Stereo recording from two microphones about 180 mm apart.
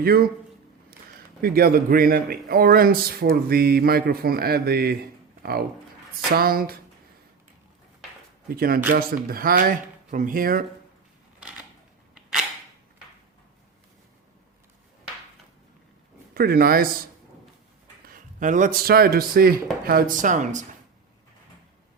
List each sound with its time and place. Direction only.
0.0 s speech: 55° right (ahead or behind)
1.4 s speech: 55° right (ahead or behind)
5.4 s a sound: 60° right (ahead or behind)
6.3 s speech: 55° right (ahead or behind)
8.4 s speech: 55° right (ahead or behind)
11.3 s a sound: 5° right (ahead or behind)
12.1 s cap gun: 5° right (ahead or behind)
16.3 s speech: 55° right (ahead or behind)
18.1 s a man's voice: 45° right (ahead or behind)